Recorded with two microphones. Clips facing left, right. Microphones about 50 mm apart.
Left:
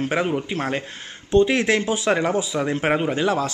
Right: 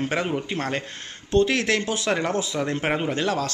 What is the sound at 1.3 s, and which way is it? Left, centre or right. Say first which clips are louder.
A man's voice: left 3 dB; centre.